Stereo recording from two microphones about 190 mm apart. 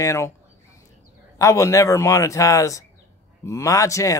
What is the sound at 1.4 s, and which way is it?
Speech, 15° left (ahead or behind).